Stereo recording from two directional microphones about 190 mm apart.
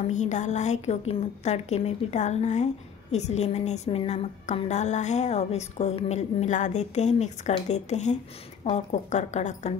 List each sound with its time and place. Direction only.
0.1 s a woman's voice: 40° left (ahead or behind)